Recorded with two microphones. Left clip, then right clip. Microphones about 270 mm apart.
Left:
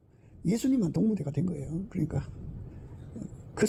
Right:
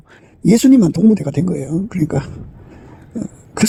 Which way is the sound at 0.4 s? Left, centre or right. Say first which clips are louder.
Right 18 dB; right.